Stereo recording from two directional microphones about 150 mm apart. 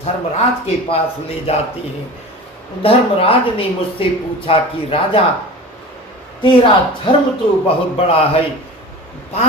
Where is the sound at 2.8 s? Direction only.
40° left (ahead or behind).